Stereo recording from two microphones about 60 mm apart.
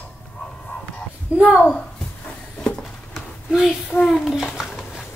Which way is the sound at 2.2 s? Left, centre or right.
Centre.